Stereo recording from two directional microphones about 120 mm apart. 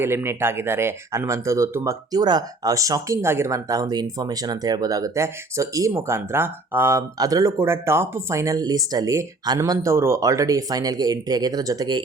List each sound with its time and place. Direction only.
0.0 s speech: 20° right (ahead or behind)